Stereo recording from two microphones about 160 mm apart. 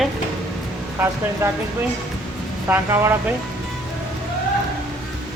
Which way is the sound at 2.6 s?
15° right (ahead or behind).